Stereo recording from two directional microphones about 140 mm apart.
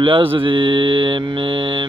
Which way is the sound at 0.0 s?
40° right (ahead or behind).